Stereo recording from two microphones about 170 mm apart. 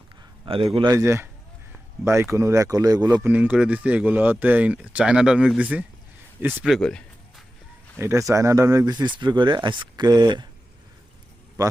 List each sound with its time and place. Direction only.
0.4 s a man's voice: 35° right (ahead or behind)
0.9 s speech: 15° right (ahead or behind)
3.2 s speech: 10° right (ahead or behind)
6.6 s a sound: centre (ahead or behind)
7.9 s speech: 15° right (ahead or behind)
11.6 s speech: 20° right (ahead or behind)